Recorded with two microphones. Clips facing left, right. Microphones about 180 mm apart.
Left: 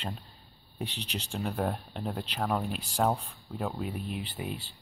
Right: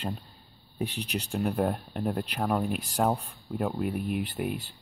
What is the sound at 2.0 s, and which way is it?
Speech, centre (ahead or behind).